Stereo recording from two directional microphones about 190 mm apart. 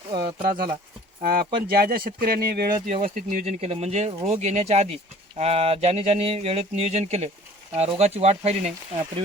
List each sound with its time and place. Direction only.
0.1 s speech: 25° right (ahead or behind)
1.2 s speech: 50° right (ahead or behind); by 8.7 s 35° right (ahead or behind)